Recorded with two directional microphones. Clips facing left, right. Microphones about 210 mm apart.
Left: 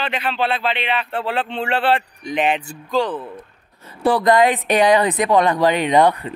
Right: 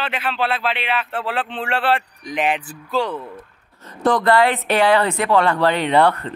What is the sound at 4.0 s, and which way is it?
Speech, 10° left (ahead or behind).